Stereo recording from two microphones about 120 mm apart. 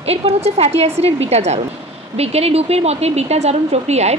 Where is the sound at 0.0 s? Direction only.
55° right (ahead or behind).